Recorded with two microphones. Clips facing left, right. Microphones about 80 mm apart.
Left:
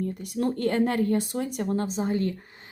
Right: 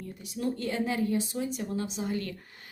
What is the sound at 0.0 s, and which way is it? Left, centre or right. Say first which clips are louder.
Speech: left 6 dB; left.